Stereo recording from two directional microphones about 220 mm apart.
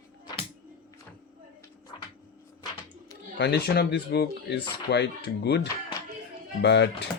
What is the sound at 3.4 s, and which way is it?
Speech, 50° left (ahead or behind).